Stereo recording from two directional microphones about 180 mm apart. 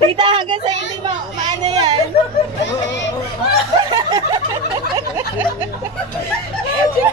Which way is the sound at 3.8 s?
25° right (ahead or behind).